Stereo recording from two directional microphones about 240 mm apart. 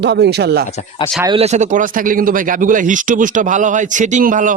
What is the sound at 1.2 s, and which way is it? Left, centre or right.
Speech, right.